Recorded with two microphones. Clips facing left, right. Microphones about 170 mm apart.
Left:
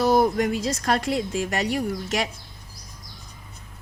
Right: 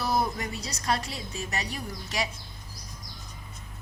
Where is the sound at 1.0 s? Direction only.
90° left.